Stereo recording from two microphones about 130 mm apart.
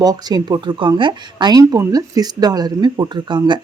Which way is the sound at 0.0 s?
30° right (ahead or behind).